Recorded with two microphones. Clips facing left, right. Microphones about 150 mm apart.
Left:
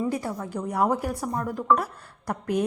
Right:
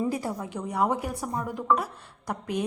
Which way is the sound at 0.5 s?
Centre (ahead or behind).